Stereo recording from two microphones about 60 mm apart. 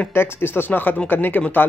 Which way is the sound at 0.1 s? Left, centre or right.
Left.